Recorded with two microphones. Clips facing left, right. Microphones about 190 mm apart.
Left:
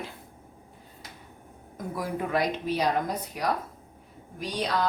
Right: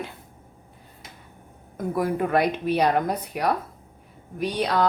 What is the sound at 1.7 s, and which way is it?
Speech, 60° right (ahead or behind).